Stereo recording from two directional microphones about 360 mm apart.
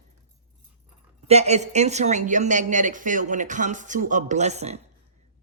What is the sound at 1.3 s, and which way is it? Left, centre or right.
A man's voice, centre.